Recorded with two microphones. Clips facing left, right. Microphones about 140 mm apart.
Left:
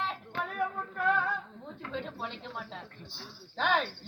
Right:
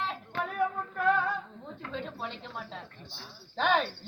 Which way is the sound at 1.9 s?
15° left (ahead or behind).